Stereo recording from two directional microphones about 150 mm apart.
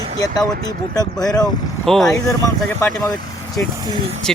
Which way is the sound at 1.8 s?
Centre (ahead or behind).